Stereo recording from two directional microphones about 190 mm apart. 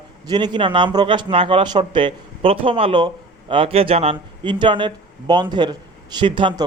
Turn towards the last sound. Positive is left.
turn(degrees=-25)  # may be behind; listen again after turning